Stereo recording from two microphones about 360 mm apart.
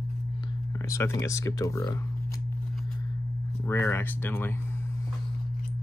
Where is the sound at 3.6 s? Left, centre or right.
Centre.